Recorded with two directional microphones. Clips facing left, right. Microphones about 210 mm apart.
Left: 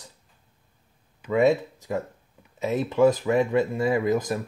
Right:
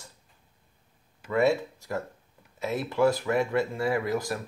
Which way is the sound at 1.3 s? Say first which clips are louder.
Left 4 dB; 20° left (ahead or behind).